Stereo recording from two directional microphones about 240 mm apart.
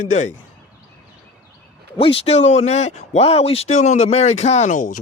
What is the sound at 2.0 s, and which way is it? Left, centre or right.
Speech, left.